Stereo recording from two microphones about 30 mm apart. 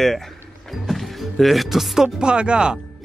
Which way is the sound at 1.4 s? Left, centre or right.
Centre.